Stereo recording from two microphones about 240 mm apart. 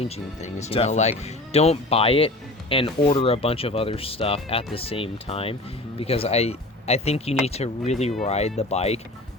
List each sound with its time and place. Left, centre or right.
0.0 s speech: left